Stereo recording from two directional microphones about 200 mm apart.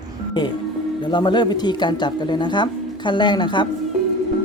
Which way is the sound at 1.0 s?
20° left (ahead or behind).